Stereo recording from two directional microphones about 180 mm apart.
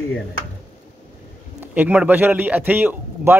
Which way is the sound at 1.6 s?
10° right (ahead or behind).